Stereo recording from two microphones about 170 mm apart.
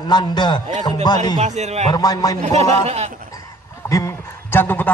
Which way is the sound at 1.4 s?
40° right (ahead or behind).